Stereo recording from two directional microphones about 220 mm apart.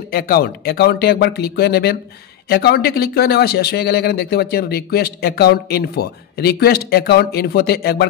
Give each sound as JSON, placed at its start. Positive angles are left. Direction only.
{"t": 0.1, "sound": "speech", "side_deg": 45}